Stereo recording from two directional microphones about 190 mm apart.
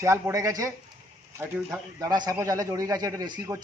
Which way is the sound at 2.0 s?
20° right (ahead or behind).